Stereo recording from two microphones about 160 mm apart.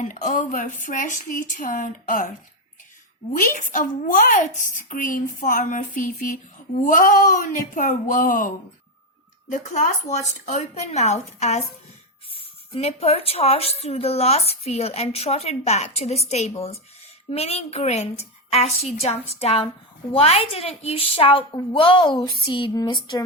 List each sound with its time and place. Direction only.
0.0 s speech: 55° left (ahead or behind)
3.3 s a woman's voice: 60° left (ahead or behind); by 23.2 s 30° left (ahead or behind)